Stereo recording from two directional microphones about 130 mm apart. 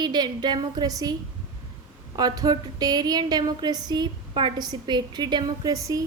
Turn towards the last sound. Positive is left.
turn(degrees=-25)  # may be behind; listen again after turning